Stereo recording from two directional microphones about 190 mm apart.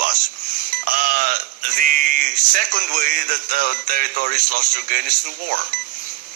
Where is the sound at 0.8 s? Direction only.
50° right (ahead or behind).